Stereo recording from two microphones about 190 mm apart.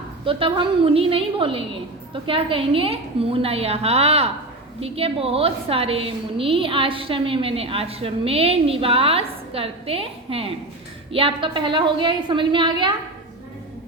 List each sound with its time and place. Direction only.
0.3 s a woman's voice: 30° right (ahead or behind)